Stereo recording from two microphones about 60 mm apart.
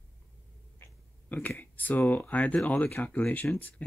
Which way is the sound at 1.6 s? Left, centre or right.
Left.